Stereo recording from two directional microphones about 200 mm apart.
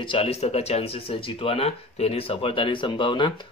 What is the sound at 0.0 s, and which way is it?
Speech, 25° left (ahead or behind).